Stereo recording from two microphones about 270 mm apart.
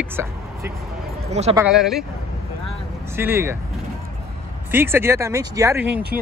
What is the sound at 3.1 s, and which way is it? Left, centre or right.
Speech, centre.